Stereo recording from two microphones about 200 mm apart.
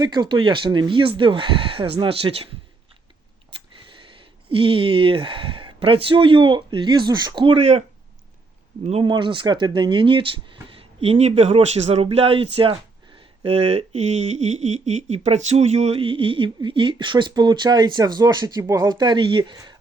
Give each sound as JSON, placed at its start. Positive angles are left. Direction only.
{"t": 0.0, "sound": "speech", "side_deg": -20}
{"t": 4.4, "sound": "speech", "side_deg": -25}
{"t": 8.9, "sound": "speech", "side_deg": -25}